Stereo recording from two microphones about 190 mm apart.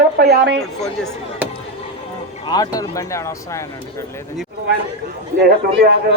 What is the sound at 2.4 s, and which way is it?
Speech, 20° left (ahead or behind).